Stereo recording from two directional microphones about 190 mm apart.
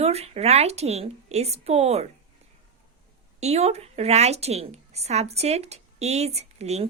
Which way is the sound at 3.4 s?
35° right (ahead or behind).